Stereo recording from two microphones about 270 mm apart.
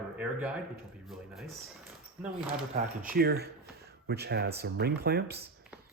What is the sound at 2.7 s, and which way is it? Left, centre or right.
Speech, right.